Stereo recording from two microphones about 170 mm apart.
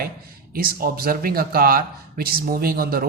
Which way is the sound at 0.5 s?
60° right (ahead or behind).